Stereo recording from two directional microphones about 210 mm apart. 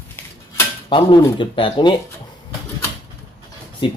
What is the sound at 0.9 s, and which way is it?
Speech, 20° left (ahead or behind).